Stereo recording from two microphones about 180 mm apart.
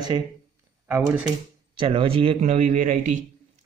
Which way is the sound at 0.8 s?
15° right (ahead or behind).